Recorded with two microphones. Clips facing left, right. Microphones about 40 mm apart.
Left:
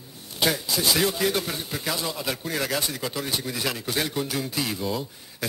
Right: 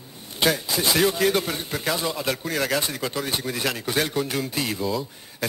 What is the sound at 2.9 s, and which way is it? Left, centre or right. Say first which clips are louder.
A man's voice: right 2 dB; centre.